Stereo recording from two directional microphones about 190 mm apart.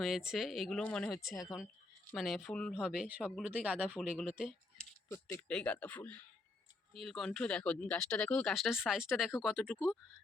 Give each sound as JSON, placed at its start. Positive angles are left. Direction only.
{"t": 0.0, "sound": "speech", "side_deg": 0}
{"t": 5.0, "sound": "speech", "side_deg": 15}